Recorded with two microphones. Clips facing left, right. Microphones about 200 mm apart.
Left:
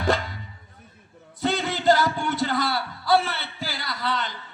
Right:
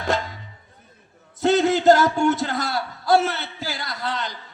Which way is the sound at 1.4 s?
45° right (ahead or behind).